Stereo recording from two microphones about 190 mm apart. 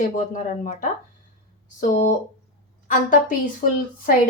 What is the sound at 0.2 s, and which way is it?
A woman's voice, 45° left (ahead or behind).